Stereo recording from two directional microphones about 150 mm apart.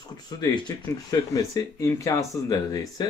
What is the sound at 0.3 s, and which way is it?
Speech, 30° left (ahead or behind).